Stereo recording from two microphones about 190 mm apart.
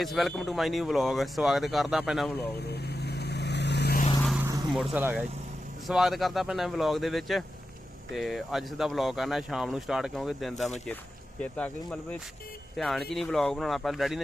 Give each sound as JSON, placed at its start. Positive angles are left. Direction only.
{"t": 0.0, "sound": "speech", "side_deg": 0}
{"t": 3.0, "sound": "vehicle", "side_deg": 60}
{"t": 4.2, "sound": "vehicle", "side_deg": 0}
{"t": 4.7, "sound": "speech", "side_deg": 0}